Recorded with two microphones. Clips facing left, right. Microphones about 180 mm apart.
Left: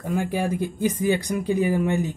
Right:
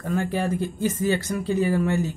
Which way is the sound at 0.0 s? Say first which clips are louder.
Even; 10° left (ahead or behind).